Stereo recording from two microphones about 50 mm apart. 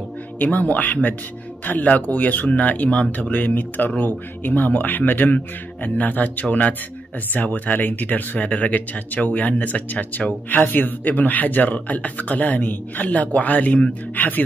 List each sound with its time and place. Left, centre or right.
0.4 s speech: left